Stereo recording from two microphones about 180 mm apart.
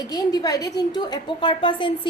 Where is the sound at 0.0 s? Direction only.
20° left (ahead or behind).